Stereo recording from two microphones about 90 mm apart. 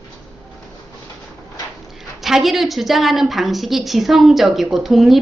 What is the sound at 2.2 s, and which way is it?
A woman's voice, 5° right (ahead or behind).